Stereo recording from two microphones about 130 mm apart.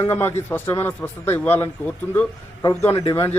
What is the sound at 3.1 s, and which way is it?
Speech, 30° left (ahead or behind).